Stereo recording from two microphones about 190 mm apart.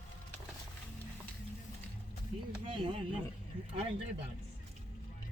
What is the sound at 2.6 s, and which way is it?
Speech, 30° right (ahead or behind).